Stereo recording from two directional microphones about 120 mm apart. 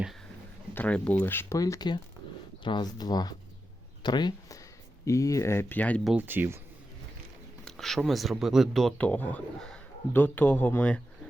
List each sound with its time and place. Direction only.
0.7 s speech: 15° left (ahead or behind)
1.5 s speech: 30° left (ahead or behind); by 6.0 s 15° left (ahead or behind)
6.1 s speech: 15° right (ahead or behind)
7.6 s speech: 5° left (ahead or behind)
9.0 s speech: 15° left (ahead or behind)